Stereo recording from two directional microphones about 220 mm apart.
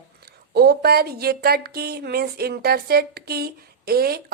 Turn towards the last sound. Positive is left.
turn(degrees=-45)  # may be behind; listen again after turning